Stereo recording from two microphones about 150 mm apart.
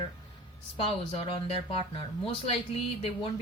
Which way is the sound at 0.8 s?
40° left (ahead or behind).